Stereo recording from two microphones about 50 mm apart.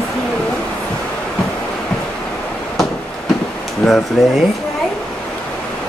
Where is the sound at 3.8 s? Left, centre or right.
Centre.